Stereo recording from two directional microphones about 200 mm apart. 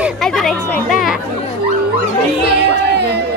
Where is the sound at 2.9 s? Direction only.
55° right (ahead or behind).